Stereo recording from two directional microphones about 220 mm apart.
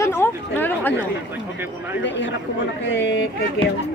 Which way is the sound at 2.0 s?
55° left (ahead or behind).